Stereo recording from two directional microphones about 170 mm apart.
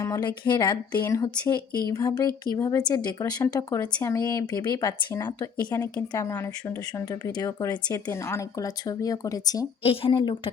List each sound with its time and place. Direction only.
0.0 s speech: 20° left (ahead or behind)
9.8 s speech: 35° left (ahead or behind)